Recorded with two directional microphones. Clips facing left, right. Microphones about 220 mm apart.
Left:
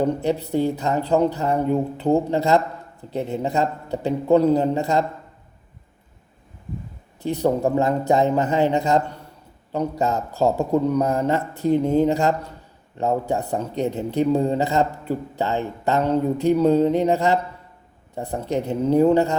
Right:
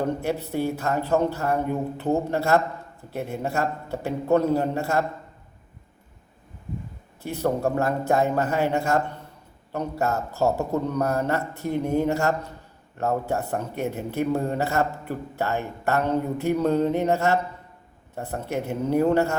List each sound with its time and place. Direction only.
0.0 s a man's voice: 15° left (ahead or behind)
7.2 s a man's voice: 15° left (ahead or behind)